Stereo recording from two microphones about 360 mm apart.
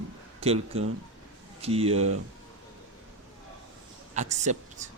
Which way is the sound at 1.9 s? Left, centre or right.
Right.